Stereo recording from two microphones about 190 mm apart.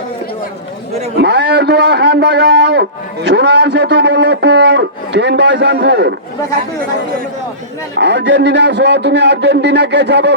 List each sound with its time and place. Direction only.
1.1 s a man's voice: 60° right (ahead or behind)
7.9 s a man's voice: 65° right (ahead or behind)